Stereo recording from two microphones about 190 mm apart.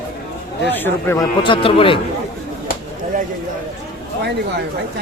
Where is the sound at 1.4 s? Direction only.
25° left (ahead or behind).